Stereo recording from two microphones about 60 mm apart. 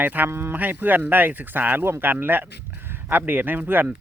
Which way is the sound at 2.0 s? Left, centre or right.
Right.